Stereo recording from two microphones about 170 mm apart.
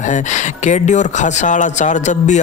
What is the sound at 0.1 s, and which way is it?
Speech, 45° left (ahead or behind).